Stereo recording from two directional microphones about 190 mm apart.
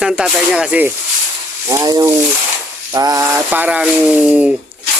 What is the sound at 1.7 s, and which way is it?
Speech, 20° right (ahead or behind).